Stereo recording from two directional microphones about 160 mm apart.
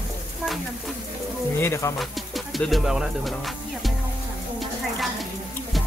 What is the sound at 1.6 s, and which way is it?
Speech, 15° left (ahead or behind).